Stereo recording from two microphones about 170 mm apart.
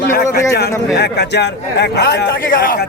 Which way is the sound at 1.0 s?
75° left (ahead or behind).